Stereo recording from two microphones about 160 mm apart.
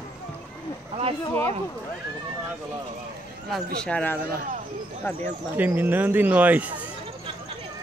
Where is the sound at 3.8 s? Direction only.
10° left (ahead or behind).